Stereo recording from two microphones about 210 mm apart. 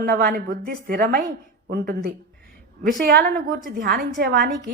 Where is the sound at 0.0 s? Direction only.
45° right (ahead or behind).